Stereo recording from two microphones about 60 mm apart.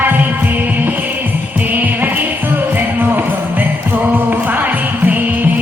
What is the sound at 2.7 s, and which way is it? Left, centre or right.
Music, right.